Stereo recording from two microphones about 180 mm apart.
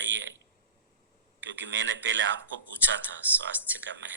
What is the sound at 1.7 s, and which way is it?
Speech, 90° right.